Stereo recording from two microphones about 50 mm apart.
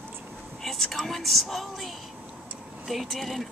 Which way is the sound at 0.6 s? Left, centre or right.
Centre.